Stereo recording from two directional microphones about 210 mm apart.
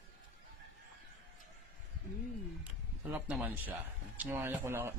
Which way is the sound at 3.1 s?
5° right (ahead or behind).